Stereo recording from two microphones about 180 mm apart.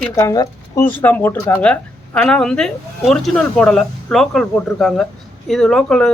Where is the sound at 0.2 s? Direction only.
15° left (ahead or behind).